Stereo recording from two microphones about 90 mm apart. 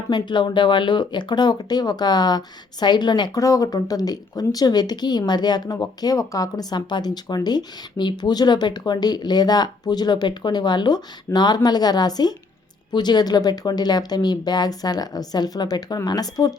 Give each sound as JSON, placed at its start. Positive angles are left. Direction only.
{"t": 0.1, "sound": "speech", "side_deg": 60}
{"t": 3.3, "sound": "speech", "side_deg": 40}